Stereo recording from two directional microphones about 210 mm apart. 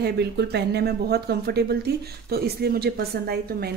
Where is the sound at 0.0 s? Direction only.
50° right (ahead or behind).